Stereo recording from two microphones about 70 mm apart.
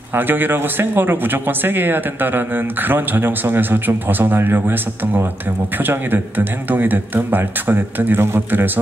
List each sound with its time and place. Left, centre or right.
0.1 s speech: right